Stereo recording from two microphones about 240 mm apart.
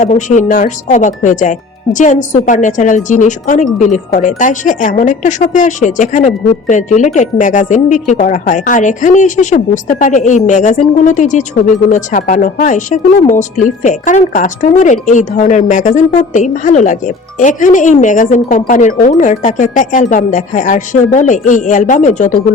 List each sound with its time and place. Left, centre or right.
0.0 s speech: left